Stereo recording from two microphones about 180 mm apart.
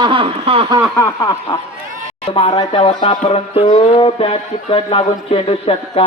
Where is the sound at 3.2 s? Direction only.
30° left (ahead or behind).